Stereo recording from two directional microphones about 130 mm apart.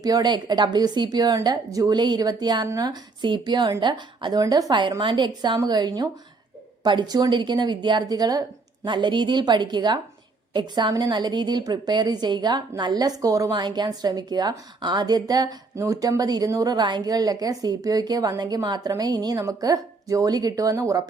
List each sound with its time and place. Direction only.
0.0 s a woman's voice: 30° right (ahead or behind)